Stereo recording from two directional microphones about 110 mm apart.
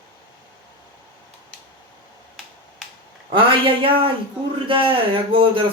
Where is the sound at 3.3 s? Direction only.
50° right (ahead or behind).